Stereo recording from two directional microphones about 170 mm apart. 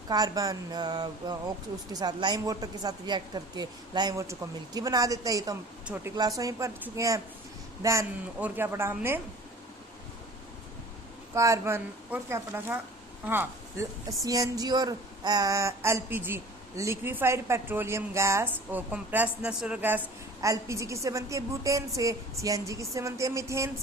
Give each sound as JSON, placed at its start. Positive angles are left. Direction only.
{"t": 0.1, "sound": "a woman's voice", "side_deg": -20}
{"t": 6.1, "sound": "a woman's voice", "side_deg": -20}
{"t": 11.3, "sound": "a woman's voice", "side_deg": -20}